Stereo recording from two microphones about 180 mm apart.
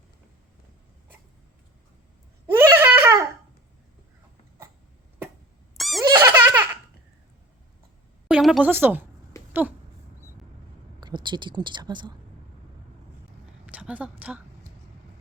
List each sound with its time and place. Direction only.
2.5 s a sound: 15° right (ahead or behind)
5.7 s squeak: centre (ahead or behind)
6.0 s baby laughter: 15° right (ahead or behind)
8.3 s speech: 5° right (ahead or behind)
11.0 s speech: 25° right (ahead or behind)
13.7 s a woman's voice: 10° right (ahead or behind)